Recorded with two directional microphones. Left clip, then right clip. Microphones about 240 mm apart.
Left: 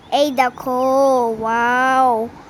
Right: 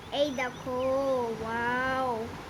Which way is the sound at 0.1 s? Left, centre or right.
Left.